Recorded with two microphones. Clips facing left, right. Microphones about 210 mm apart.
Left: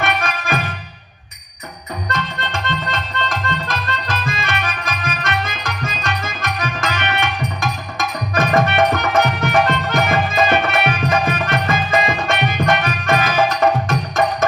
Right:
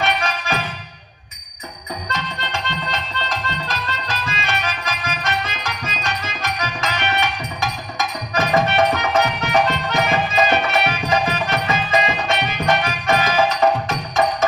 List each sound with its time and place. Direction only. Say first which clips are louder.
0.0 s music: left 1 dB; 50° left (ahead or behind)
2.0 s music: left 4 dB; 55° left (ahead or behind)